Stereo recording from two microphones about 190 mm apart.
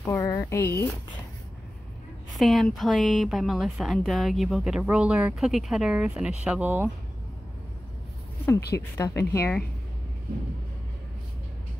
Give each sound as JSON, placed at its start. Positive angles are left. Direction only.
{"t": 0.1, "sound": "speech", "side_deg": 15}
{"t": 2.3, "sound": "a woman's voice", "side_deg": 0}
{"t": 8.5, "sound": "speech", "side_deg": 60}
{"t": 8.9, "sound": "speech", "side_deg": 15}